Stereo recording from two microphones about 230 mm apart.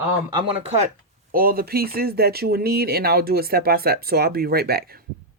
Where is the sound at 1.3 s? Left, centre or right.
Right.